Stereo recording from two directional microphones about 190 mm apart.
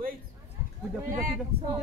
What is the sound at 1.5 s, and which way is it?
Speech, 55° right (ahead or behind).